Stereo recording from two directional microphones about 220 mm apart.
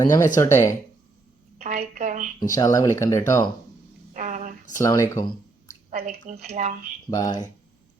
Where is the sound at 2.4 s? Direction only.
15° left (ahead or behind).